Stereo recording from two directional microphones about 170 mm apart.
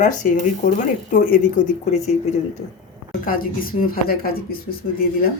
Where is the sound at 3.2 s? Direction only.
55° left (ahead or behind).